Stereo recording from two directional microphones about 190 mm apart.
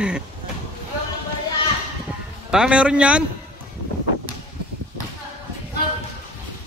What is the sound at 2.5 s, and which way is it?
Speech, 5° right (ahead or behind).